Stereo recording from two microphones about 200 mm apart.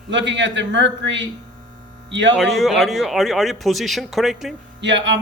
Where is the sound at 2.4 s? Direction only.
Centre (ahead or behind).